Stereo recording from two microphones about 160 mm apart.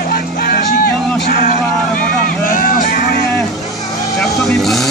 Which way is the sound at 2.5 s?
60° left (ahead or behind).